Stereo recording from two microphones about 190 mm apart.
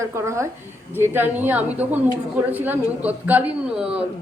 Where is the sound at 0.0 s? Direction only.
15° right (ahead or behind).